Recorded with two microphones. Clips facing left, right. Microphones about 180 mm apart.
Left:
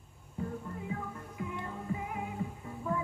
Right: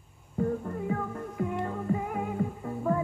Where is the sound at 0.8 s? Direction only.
45° right (ahead or behind).